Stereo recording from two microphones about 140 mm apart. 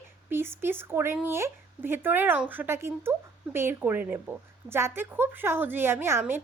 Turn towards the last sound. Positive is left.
turn(degrees=-15)  # may be behind; listen again after turning